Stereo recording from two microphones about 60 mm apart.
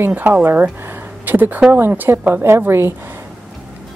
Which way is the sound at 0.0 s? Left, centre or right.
Right.